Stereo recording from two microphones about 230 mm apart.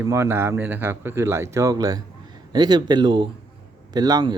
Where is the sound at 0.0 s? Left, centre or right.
Centre.